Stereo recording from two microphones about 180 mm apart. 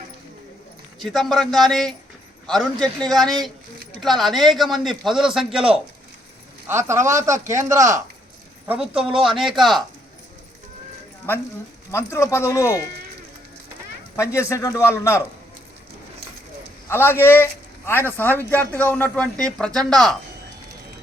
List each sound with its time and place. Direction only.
0.9 s speech: centre (ahead or behind)
6.7 s speech: 15° right (ahead or behind)
11.9 s speech: 15° left (ahead or behind)
14.3 s speech: 15° left (ahead or behind)
16.9 s speech: 15° left (ahead or behind)